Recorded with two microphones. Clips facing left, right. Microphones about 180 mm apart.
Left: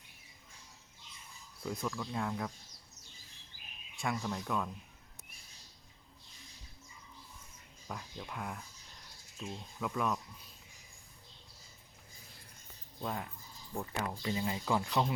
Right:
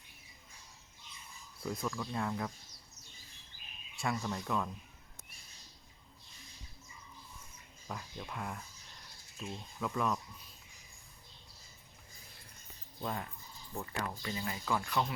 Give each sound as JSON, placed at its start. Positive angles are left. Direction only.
{"t": 1.6, "sound": "speech", "side_deg": 0}
{"t": 3.9, "sound": "speech", "side_deg": 0}
{"t": 7.9, "sound": "speech", "side_deg": 0}
{"t": 13.0, "sound": "speech", "side_deg": 5}
{"t": 13.7, "sound": "speech", "side_deg": 15}